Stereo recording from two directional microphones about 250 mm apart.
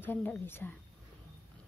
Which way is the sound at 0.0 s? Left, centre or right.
Centre.